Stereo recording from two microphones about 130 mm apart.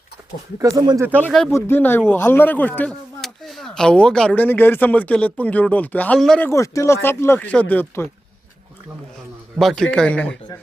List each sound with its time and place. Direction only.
0.6 s speech: 30° right (ahead or behind)
1.5 s speech: 15° left (ahead or behind)
3.2 s speech: centre (ahead or behind)
6.4 s speech: 20° left (ahead or behind)
9.6 s a man's voice: 5° left (ahead or behind)